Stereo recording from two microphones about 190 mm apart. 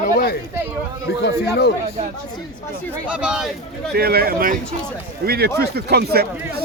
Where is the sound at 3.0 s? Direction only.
5° right (ahead or behind).